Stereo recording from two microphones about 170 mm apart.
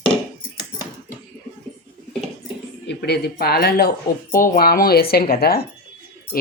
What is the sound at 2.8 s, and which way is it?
Speech, 85° left.